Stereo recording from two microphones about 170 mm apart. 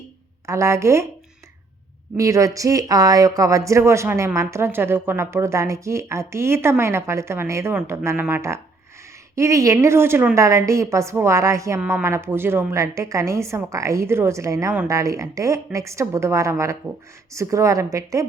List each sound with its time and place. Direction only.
0.4 s speech: 15° right (ahead or behind)
2.1 s a woman's voice: 20° right (ahead or behind)